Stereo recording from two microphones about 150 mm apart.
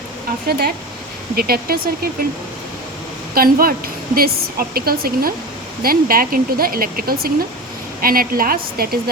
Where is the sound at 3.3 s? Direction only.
80° right.